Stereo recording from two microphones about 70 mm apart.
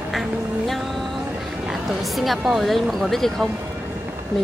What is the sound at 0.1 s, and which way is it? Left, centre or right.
Music, centre.